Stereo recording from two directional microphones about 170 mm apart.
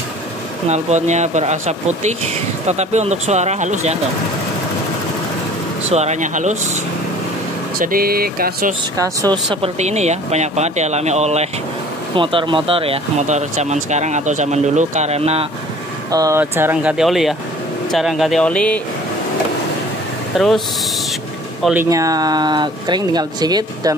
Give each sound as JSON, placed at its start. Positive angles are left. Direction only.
{"t": 0.7, "sound": "speech", "side_deg": -40}
{"t": 5.9, "sound": "speech", "side_deg": -40}
{"t": 7.8, "sound": "speech", "side_deg": -60}
{"t": 8.9, "sound": "speech", "side_deg": -20}
{"t": 9.8, "sound": "speech", "side_deg": -40}
{"t": 12.2, "sound": "speech", "side_deg": -30}
{"t": 16.1, "sound": "speech", "side_deg": -20}
{"t": 20.3, "sound": "speech", "side_deg": 0}
{"t": 21.8, "sound": "speech", "side_deg": -20}